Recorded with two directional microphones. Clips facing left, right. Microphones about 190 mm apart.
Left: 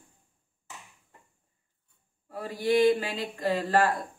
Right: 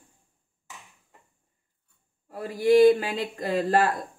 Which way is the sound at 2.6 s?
50° right (ahead or behind).